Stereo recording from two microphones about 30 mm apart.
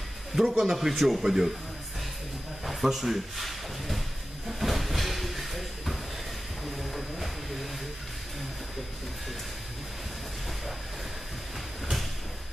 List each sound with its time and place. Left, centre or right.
0.4 s speech: centre
1.2 s speech: centre
2.6 s speech: centre
3.4 s a sound: centre
4.5 s train: centre
6.8 s a sound: centre